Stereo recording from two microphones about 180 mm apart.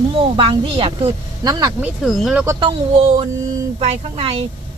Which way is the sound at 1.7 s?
5° right (ahead or behind).